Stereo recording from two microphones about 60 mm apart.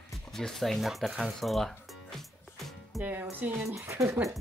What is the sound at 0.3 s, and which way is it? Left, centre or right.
Speech, centre.